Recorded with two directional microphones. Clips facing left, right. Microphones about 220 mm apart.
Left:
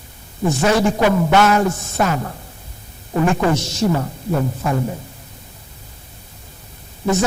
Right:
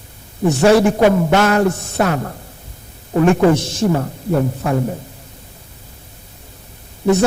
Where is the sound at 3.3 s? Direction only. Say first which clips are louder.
Right 5 dB; 55° right (ahead or behind).